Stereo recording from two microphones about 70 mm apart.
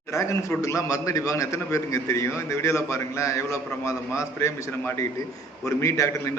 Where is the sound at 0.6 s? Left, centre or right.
Left.